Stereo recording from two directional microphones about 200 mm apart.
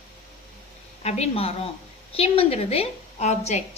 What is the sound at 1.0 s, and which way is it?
A woman's voice, 30° left (ahead or behind).